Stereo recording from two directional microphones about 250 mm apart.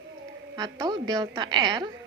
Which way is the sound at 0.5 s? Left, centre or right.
Centre.